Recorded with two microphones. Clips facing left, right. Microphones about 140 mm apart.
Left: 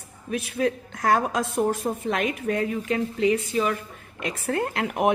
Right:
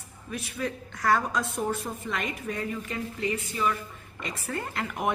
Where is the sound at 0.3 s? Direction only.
65° left (ahead or behind).